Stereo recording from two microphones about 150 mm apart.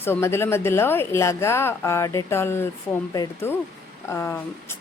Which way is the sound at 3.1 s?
25° left (ahead or behind).